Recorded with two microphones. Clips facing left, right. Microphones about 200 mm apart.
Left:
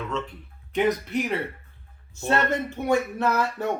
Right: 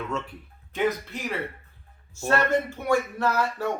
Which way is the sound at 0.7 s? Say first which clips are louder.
Left 3 dB; 20° left (ahead or behind).